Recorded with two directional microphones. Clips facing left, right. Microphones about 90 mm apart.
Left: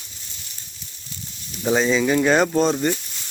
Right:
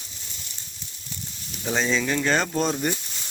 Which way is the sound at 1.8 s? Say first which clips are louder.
Left 5 dB; 5° left (ahead or behind).